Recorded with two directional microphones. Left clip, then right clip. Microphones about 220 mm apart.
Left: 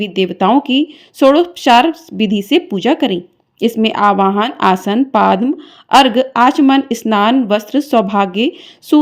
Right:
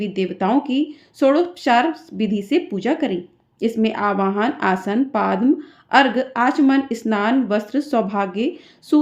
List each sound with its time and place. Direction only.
0.0 s speech: 30° left (ahead or behind)